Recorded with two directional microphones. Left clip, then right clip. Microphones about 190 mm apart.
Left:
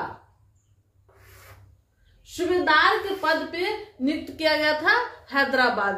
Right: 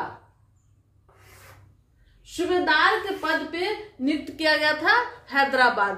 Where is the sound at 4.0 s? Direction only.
20° right (ahead or behind).